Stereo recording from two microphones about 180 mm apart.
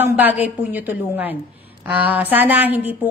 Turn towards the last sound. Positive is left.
turn(degrees=-10)  # may be behind; listen again after turning